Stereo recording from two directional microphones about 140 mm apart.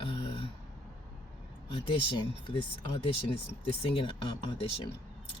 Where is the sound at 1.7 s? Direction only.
35° left (ahead or behind).